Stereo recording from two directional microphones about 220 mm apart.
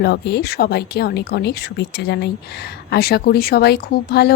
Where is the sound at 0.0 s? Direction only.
50° left (ahead or behind).